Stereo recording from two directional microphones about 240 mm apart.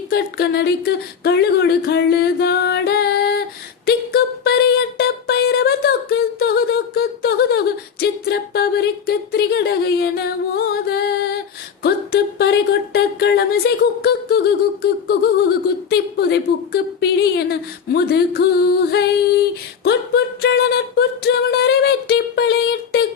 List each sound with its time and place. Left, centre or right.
0.1 s speech: left
3.8 s music: left
8.2 s a sound: left
15.9 s speech: left